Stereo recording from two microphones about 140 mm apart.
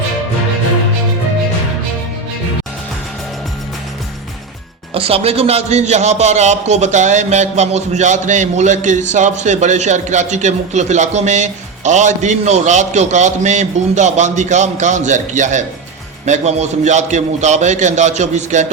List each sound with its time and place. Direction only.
4.9 s a man's voice: 45° right (ahead or behind)